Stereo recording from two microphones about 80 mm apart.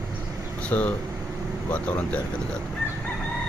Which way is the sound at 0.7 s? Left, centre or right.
Centre.